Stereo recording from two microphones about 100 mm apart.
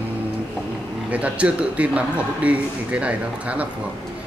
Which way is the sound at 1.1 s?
15° right (ahead or behind).